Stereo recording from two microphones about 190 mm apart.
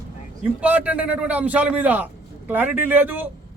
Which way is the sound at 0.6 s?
10° right (ahead or behind).